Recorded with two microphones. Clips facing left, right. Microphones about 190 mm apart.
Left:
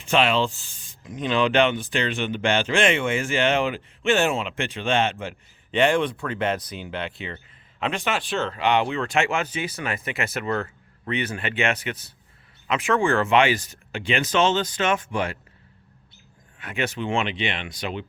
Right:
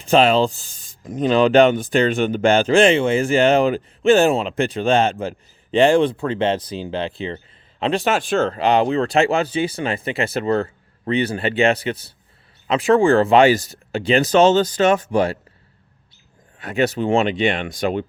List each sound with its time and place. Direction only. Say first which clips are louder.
0.0 s speech: right 6 dB; 40° right (ahead or behind)
16.6 s speech: right 8 dB; 40° right (ahead or behind)